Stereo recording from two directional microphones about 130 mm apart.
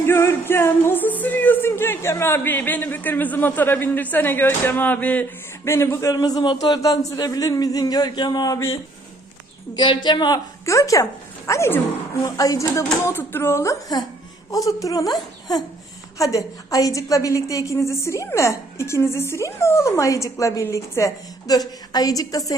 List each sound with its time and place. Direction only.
0.1 s music: 20° left (ahead or behind)
5.6 s a woman's voice: 20° left (ahead or behind)
9.7 s a woman's voice: 35° left (ahead or behind)